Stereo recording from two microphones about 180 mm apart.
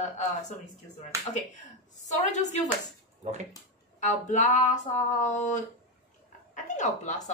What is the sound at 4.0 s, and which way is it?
Speech, 45° left (ahead or behind).